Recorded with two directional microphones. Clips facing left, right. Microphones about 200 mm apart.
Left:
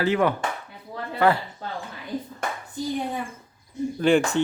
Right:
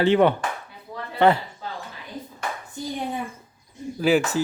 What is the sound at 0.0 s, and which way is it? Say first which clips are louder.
Speech: right 4 dB; 25° right (ahead or behind).